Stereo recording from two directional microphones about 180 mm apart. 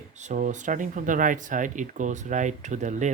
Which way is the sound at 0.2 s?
45° right (ahead or behind).